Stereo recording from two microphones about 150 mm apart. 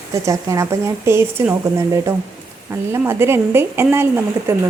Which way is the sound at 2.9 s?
15° right (ahead or behind).